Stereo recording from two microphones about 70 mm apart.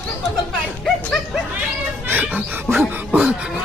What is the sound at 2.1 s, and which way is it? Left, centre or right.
Music, right.